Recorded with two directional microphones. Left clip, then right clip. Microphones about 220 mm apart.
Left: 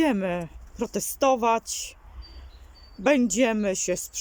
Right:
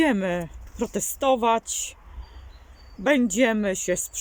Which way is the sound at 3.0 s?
Centre (ahead or behind).